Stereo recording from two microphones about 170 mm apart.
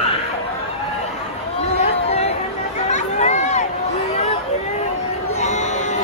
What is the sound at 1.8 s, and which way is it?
Chatter, 40° left (ahead or behind).